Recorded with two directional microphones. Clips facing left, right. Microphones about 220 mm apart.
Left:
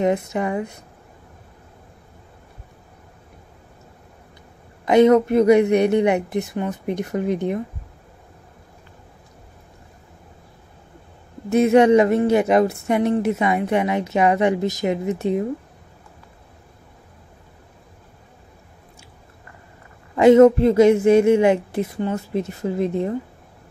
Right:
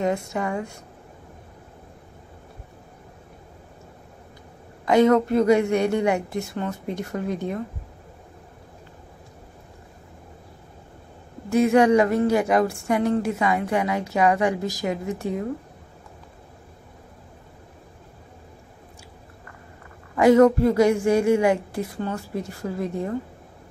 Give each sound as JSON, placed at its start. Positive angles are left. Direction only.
{"t": 0.0, "sound": "speech", "side_deg": 20}
{"t": 4.8, "sound": "speech", "side_deg": 20}
{"t": 11.5, "sound": "speech", "side_deg": 20}
{"t": 20.2, "sound": "speech", "side_deg": 20}